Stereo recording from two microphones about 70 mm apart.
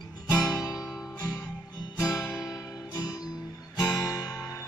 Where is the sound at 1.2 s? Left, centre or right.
Left.